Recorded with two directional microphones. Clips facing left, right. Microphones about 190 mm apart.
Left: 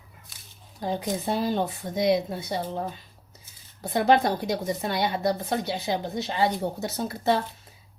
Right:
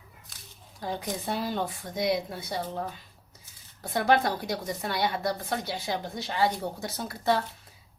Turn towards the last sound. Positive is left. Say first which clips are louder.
# left 2 dB
turn(degrees=25)  # may be behind; listen again after turning